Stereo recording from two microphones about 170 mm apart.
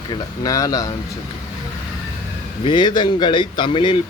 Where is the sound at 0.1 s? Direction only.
20° left (ahead or behind).